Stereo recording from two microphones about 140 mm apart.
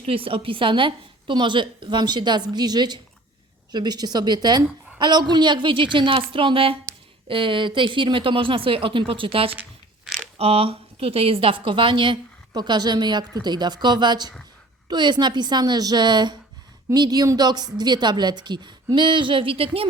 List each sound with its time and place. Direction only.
0.0 s a woman's voice: 40° right (ahead or behind)